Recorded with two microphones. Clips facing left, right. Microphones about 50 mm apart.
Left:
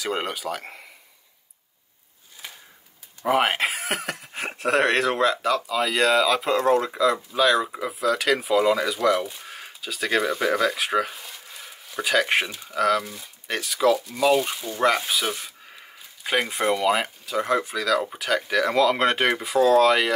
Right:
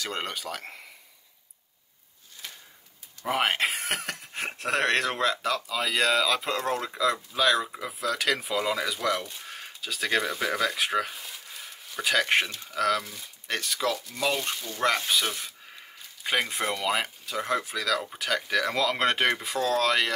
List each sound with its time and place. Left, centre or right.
0.0 s speech: centre
2.4 s a sound: centre
3.3 s speech: centre